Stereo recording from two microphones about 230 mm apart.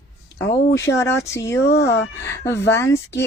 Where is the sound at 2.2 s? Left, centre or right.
Centre.